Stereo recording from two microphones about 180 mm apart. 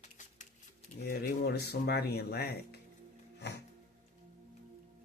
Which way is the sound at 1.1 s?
60° left (ahead or behind).